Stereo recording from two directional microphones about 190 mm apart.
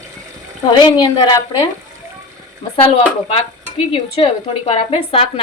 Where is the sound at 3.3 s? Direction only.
25° left (ahead or behind).